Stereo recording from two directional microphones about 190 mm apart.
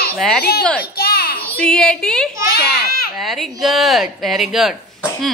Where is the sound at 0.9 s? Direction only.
55° left (ahead or behind).